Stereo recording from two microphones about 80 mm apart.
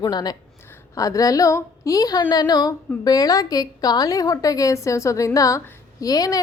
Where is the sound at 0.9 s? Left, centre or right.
Left.